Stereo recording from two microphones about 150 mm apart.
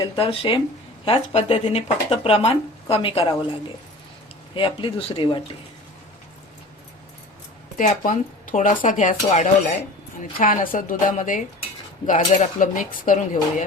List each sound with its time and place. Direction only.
0.0 s speech: 35° left (ahead or behind)
4.5 s speech: 35° left (ahead or behind)
7.8 s speech: 60° left (ahead or behind)